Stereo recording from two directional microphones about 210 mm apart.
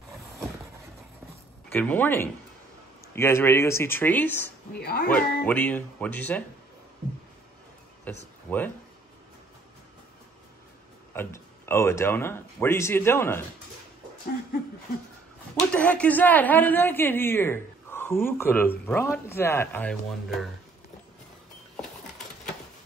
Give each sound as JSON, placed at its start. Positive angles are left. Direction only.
{"t": 1.7, "sound": "speech", "side_deg": 10}
{"t": 4.7, "sound": "speech", "side_deg": 45}
{"t": 5.1, "sound": "speech", "side_deg": 5}
{"t": 8.1, "sound": "speech", "side_deg": 5}
{"t": 11.1, "sound": "speech", "side_deg": 10}
{"t": 15.7, "sound": "speech", "side_deg": 5}